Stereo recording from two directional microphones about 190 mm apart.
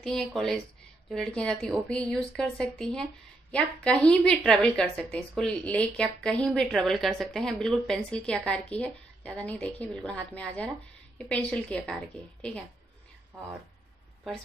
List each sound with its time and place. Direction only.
0.0 s speech: centre (ahead or behind)